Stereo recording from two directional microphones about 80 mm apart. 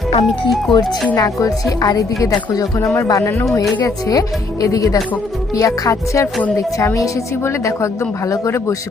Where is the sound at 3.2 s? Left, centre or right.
Left.